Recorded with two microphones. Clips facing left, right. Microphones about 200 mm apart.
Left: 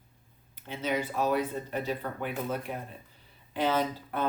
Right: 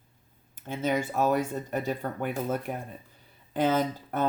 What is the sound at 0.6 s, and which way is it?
Speech, 45° right (ahead or behind).